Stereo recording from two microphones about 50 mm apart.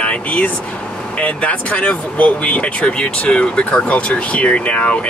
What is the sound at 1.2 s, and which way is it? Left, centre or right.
Speech, left.